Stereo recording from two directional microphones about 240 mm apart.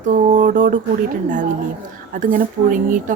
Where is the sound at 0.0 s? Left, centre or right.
Right.